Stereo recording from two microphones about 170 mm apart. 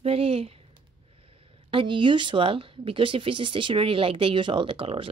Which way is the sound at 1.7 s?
30° right (ahead or behind).